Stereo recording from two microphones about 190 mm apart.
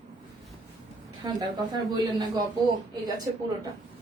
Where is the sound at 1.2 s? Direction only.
20° right (ahead or behind).